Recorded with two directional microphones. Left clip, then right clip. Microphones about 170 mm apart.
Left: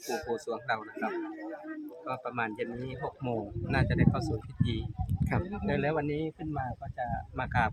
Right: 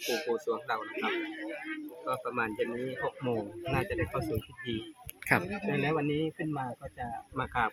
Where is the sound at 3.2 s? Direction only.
15° left (ahead or behind).